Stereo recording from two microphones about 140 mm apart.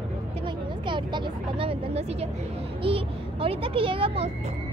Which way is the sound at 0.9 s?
35° right (ahead or behind).